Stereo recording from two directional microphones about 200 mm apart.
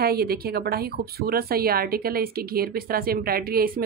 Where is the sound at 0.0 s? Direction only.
50° right (ahead or behind).